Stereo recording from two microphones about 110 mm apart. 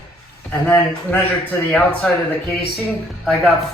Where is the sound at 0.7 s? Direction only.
20° left (ahead or behind).